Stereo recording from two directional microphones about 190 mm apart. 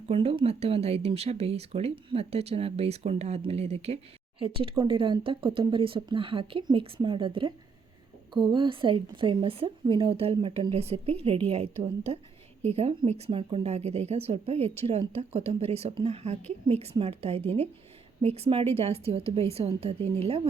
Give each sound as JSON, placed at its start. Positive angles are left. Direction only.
{"t": 0.1, "sound": "a woman's voice", "side_deg": -30}